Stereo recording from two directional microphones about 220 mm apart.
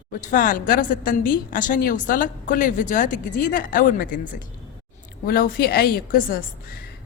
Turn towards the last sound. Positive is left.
turn(degrees=40)  # may be behind; listen again after turning